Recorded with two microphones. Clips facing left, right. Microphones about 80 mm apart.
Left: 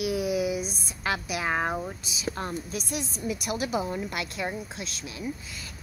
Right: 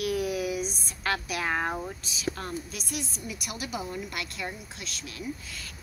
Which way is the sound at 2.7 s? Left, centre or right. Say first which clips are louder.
Left 4 dB; left.